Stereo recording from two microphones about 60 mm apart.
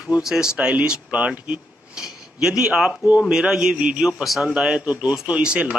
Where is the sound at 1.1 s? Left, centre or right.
Right.